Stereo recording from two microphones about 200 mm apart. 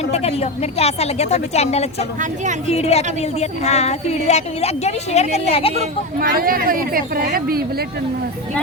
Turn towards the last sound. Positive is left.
turn(degrees=-50)  # may be behind; listen again after turning